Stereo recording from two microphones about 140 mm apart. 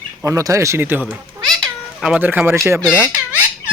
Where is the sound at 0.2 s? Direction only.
20° right (ahead or behind).